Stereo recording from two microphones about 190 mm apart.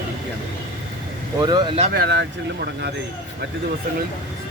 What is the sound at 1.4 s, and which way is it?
Speech, 25° right (ahead or behind).